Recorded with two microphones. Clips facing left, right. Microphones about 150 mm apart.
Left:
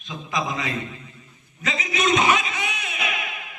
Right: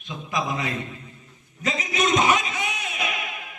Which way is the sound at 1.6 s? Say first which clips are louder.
Even; 45° right (ahead or behind).